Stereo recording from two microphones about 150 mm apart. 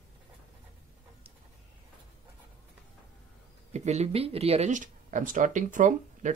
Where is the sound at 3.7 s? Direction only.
50° right (ahead or behind).